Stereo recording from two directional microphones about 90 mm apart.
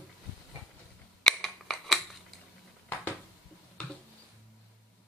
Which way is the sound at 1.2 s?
Centre (ahead or behind).